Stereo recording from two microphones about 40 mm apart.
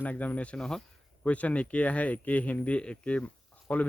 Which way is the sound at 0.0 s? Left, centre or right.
Left.